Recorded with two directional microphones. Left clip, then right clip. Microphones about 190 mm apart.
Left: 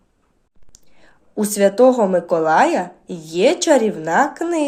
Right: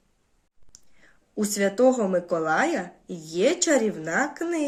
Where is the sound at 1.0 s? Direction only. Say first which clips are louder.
Left 6 dB; 20° right (ahead or behind).